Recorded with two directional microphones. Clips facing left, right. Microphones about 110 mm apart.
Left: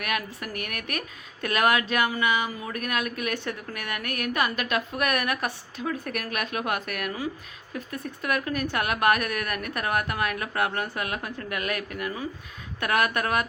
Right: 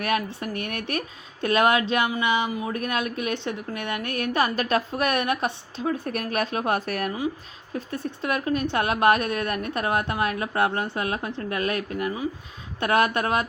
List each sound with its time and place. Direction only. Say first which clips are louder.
0.0 s speech: right 5 dB; 30° right (ahead or behind)